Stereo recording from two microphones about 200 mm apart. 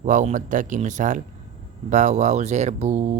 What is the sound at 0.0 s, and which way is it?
Speech, 40° right (ahead or behind).